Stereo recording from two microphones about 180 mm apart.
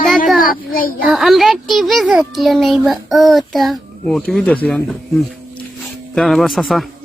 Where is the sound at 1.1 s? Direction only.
Centre (ahead or behind).